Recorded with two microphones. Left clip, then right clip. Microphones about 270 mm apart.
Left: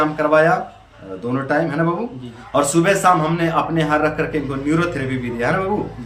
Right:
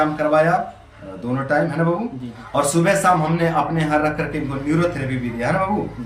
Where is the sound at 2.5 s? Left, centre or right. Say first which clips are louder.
Left 2 dB; centre.